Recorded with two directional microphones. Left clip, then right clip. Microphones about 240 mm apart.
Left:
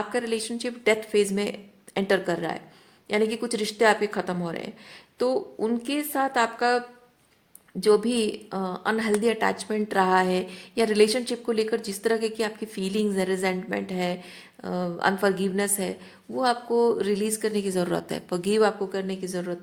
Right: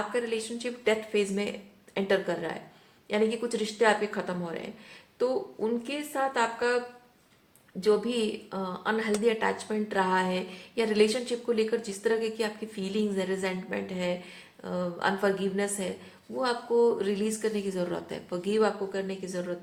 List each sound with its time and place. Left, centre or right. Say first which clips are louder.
0.1 s speech: left 3 dB; left